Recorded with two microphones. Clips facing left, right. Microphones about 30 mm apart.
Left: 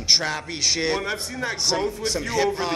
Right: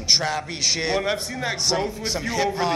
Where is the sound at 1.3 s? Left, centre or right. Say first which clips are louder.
Right 1 dB; right.